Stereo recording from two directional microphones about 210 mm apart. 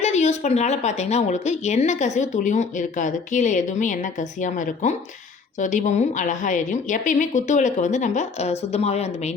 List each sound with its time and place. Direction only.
0.0 s a woman's voice: 30° left (ahead or behind)